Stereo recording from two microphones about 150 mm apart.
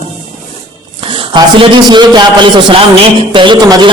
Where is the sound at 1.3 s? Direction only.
30° right (ahead or behind).